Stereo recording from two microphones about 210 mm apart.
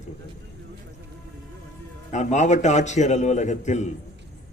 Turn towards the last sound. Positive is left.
turn(degrees=35)  # may be behind; listen again after turning